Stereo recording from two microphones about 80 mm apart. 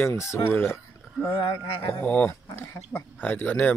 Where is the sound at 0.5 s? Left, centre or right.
Left.